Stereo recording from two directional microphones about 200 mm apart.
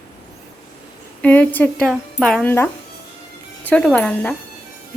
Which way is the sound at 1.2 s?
10° left (ahead or behind).